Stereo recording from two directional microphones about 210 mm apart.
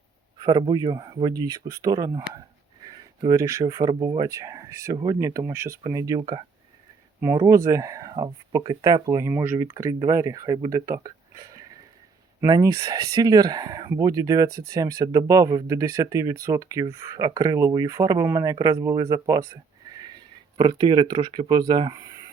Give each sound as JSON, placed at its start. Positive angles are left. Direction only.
{"t": 0.3, "sound": "speech", "side_deg": -20}